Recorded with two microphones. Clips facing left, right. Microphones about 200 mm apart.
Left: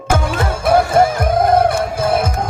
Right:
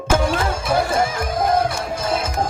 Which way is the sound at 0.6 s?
55° left (ahead or behind).